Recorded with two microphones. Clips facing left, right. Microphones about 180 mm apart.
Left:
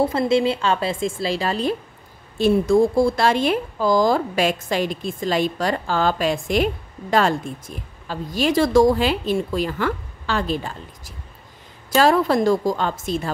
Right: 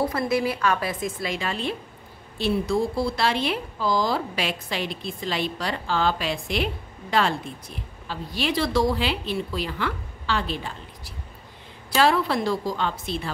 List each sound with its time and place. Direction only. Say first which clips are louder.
0.0 s a woman's voice: left 5 dB; 25° left (ahead or behind); by 13.3 s 45° left (ahead or behind)